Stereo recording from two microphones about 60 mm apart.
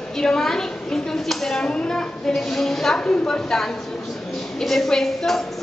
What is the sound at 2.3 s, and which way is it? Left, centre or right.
A woman's voice, centre.